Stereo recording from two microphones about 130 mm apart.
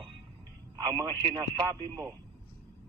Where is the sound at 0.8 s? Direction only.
30° right (ahead or behind).